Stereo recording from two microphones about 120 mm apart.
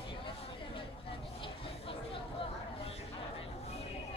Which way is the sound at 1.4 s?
50° left (ahead or behind).